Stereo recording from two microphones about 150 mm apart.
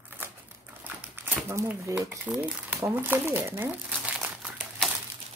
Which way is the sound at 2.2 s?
10° right (ahead or behind).